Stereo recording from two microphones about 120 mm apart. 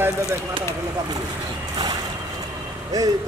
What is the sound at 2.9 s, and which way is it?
Speech, 30° right (ahead or behind).